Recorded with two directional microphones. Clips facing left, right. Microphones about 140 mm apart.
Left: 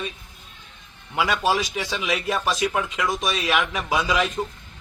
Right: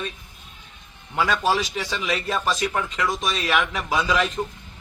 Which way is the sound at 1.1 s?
10° left (ahead or behind).